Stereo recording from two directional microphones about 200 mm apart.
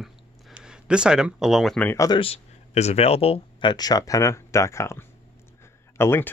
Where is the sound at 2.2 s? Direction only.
30° left (ahead or behind).